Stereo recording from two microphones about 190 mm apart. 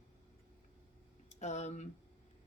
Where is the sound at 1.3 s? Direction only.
35° left (ahead or behind).